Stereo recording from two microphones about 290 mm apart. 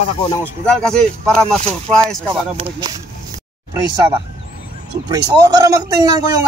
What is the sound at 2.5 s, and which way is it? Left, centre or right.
Speech, centre.